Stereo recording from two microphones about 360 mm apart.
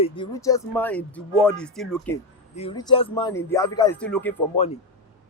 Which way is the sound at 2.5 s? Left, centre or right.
Centre.